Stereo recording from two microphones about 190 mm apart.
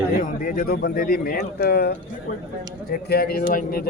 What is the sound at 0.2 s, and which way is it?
A man's voice, 50° left (ahead or behind).